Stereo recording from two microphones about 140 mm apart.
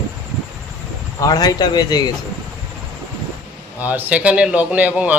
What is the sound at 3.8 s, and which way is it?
A man's voice, 10° right (ahead or behind).